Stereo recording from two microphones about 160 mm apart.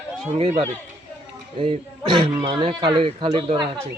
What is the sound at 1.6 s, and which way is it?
Speech, 35° right (ahead or behind).